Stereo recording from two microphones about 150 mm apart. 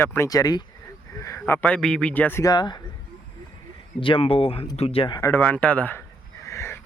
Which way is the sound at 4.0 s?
35° left (ahead or behind).